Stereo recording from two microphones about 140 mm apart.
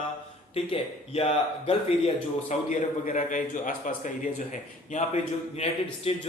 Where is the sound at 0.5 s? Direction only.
45° left (ahead or behind).